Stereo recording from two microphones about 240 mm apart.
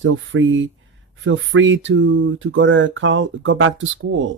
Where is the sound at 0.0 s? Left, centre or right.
Right.